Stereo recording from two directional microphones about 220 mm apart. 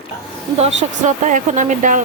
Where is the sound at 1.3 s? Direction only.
35° right (ahead or behind).